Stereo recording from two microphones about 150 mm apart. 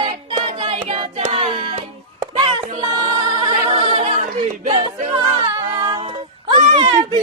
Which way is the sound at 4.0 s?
40° right (ahead or behind).